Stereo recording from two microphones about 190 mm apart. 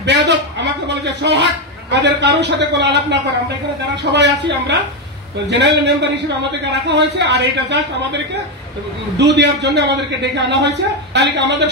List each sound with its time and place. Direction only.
0.0 s a man's voice: 65° right (ahead or behind)
9.2 s a man's voice: 65° right (ahead or behind)